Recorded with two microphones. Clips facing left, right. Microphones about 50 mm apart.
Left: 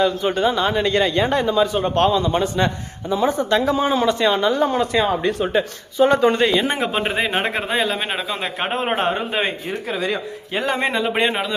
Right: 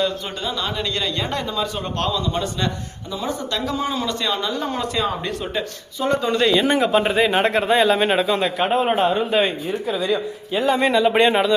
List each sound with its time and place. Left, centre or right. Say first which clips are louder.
0.0 s a man's voice: left 6 dB; left
2.0 s a man's voice: left 5 dB; left
6.1 s speech: left 3 dB; left
6.3 s a man's voice: right 1 dB; left
7.4 s speech: right 4 dB; centre
8.5 s a man's voice: even; left
9.6 s speech: right 2 dB; left
10.8 s a man's voice: right 5 dB; left
11.0 s speech: right 4 dB; centre